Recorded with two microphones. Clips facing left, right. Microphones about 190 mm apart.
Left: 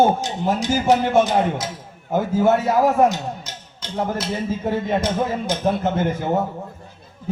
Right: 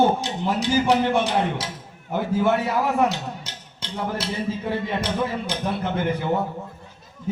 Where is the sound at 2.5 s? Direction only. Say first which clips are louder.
Left 7 dB; 45° left (ahead or behind).